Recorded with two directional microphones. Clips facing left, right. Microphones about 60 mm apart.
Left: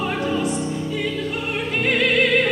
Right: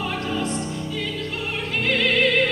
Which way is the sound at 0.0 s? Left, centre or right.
Centre.